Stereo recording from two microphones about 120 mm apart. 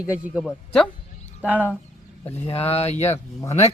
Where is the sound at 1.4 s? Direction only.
15° right (ahead or behind).